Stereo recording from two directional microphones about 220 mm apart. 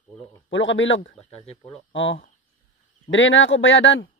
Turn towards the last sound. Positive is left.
turn(degrees=55)  # may be behind; listen again after turning